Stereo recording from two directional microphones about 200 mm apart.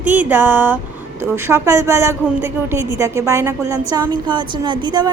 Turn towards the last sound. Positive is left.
turn(degrees=-20)  # may be behind; listen again after turning